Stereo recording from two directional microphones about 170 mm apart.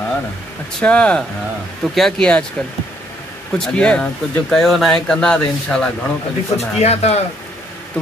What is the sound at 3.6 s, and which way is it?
Speech, 5° left (ahead or behind).